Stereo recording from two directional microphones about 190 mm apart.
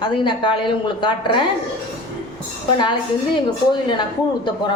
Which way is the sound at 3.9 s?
25° left (ahead or behind).